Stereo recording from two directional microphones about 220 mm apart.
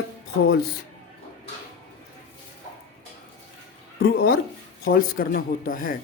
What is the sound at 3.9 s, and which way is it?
Speech, 45° left (ahead or behind).